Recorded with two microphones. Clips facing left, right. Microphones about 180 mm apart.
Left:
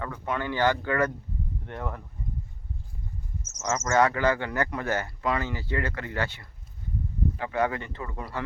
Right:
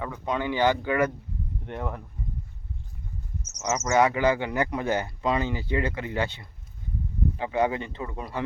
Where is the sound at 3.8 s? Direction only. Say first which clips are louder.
Right 1 dB; 15° right (ahead or behind).